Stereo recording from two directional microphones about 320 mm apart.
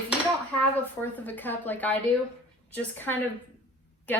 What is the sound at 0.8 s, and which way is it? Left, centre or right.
A woman's voice, centre.